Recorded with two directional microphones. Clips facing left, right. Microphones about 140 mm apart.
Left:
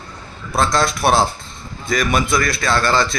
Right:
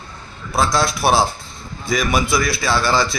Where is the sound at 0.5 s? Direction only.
5° right (ahead or behind).